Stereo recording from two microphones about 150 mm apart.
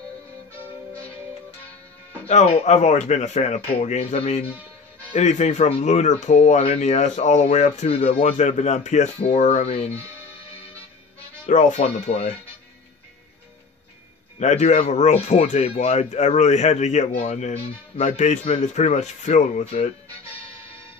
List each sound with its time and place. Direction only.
2.2 s speech: 45° left (ahead or behind)
11.4 s speech: 50° left (ahead or behind)
14.4 s speech: 50° left (ahead or behind)